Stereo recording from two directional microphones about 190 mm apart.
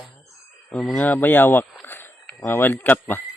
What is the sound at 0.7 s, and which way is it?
Speech, 5° left (ahead or behind).